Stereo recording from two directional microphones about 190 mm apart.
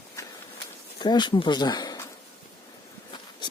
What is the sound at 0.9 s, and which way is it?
Speech, 25° left (ahead or behind).